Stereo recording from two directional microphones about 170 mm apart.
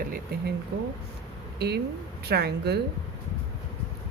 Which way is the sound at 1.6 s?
75° right (ahead or behind).